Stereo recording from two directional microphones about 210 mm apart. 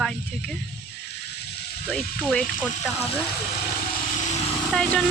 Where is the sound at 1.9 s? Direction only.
5° left (ahead or behind).